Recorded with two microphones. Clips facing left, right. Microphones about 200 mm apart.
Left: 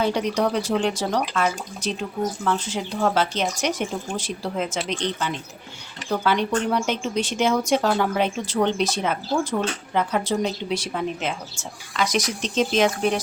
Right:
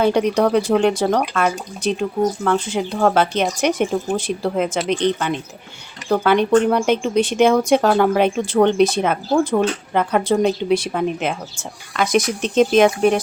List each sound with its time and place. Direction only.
0.0 s speech: 55° right (ahead or behind)